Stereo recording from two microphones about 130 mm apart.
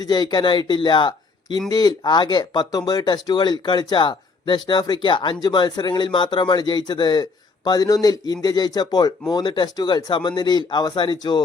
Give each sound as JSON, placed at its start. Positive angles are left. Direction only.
{"t": 0.0, "sound": "speech", "side_deg": 30}